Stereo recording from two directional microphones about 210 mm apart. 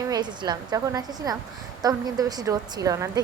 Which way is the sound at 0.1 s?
20° right (ahead or behind).